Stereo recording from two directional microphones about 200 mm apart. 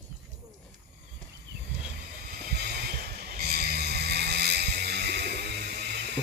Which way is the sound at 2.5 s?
50° right (ahead or behind).